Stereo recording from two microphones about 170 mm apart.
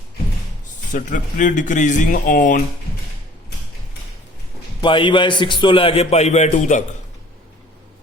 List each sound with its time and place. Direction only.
0.9 s speech: 50° left (ahead or behind)
4.8 s a man's voice: 30° left (ahead or behind); by 6.8 s 45° left (ahead or behind)